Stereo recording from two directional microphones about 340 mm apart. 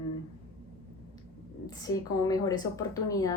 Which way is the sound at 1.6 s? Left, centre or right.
Centre.